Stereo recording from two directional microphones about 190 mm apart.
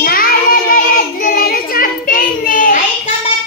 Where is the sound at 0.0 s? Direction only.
50° left (ahead or behind).